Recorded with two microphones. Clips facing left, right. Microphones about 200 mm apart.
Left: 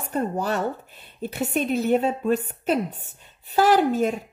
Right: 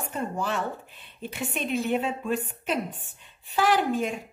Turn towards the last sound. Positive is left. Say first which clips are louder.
# left 5 dB
turn(degrees=40)  # may be behind; listen again after turning